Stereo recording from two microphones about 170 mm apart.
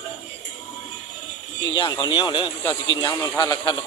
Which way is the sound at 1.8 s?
25° left (ahead or behind).